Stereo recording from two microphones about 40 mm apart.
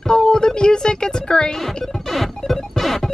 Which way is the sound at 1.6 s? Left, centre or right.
Centre.